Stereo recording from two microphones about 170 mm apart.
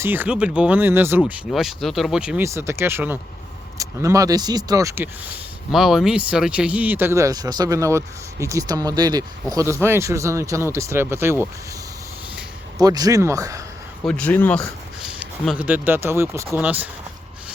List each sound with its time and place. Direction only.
0.0 s speech: 10° right (ahead or behind)
1.5 s speech: centre (ahead or behind); by 5.0 s 20° right (ahead or behind)
5.7 s speech: centre (ahead or behind)
12.8 s speech: 20° right (ahead or behind)
14.0 s speech: 5° left (ahead or behind)
15.0 s speech: 5° right (ahead or behind)